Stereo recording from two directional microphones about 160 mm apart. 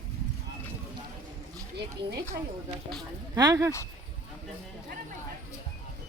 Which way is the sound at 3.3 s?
20° right (ahead or behind).